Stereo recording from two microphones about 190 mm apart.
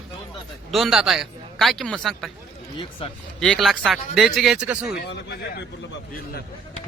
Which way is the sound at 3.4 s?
Centre (ahead or behind).